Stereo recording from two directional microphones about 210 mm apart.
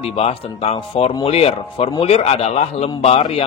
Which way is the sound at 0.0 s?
30° left (ahead or behind).